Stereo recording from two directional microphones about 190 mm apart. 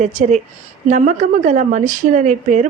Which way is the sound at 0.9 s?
40° right (ahead or behind).